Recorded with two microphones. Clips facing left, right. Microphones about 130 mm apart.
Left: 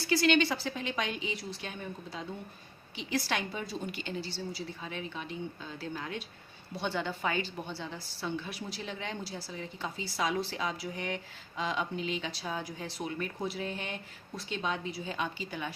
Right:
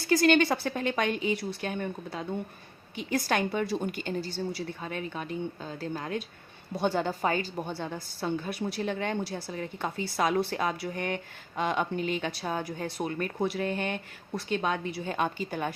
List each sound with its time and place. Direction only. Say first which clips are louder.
0.0 s a woman's voice: right 4 dB; 45° right (ahead or behind)
2.9 s a woman's voice: right 5 dB; 50° right (ahead or behind)